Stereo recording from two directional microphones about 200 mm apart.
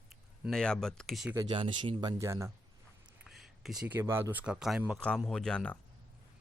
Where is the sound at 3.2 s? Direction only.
Centre (ahead or behind).